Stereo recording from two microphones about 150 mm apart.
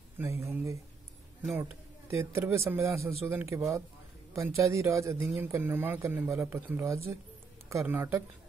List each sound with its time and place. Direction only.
0.2 s speech: 15° right (ahead or behind)